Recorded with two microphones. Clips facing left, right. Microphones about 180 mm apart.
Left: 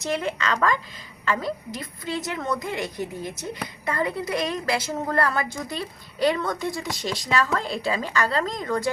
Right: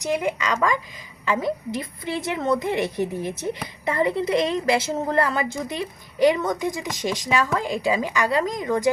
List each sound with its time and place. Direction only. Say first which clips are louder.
0.0 s a woman's voice: right 2 dB; 15° right (ahead or behind)